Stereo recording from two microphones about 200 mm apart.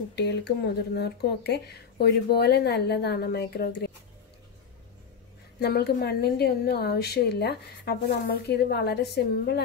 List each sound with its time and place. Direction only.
0.1 s speech: 55° left (ahead or behind)
5.6 s a woman's voice: 50° left (ahead or behind)